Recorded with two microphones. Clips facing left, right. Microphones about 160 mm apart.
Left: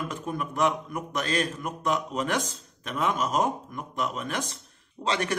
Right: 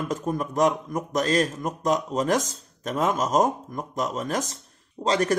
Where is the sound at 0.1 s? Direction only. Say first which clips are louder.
Right 5 dB; 40° right (ahead or behind).